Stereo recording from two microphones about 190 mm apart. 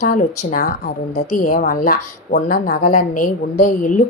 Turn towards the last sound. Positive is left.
turn(degrees=40)  # may be behind; listen again after turning